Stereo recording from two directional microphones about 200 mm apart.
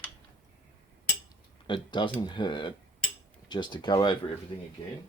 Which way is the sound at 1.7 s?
25° left (ahead or behind).